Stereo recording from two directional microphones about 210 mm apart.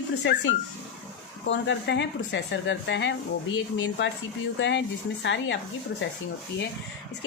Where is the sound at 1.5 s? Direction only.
60° left (ahead or behind).